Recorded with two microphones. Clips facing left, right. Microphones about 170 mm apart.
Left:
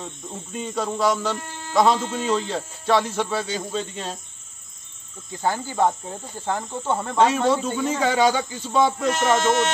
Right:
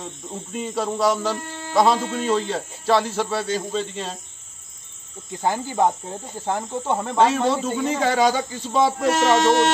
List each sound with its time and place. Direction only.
0.0 s speech: 5° right (ahead or behind)
5.4 s speech: 15° right (ahead or behind)
7.2 s speech: centre (ahead or behind)
9.0 s music: 65° right (ahead or behind)